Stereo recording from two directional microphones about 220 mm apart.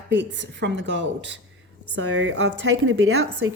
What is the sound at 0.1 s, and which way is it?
A woman's voice, 55° right (ahead or behind).